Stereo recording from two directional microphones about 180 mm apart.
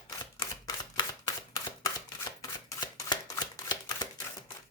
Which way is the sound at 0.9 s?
20° left (ahead or behind).